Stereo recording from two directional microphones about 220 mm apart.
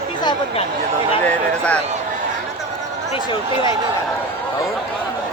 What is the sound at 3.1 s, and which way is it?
Speech, 20° left (ahead or behind).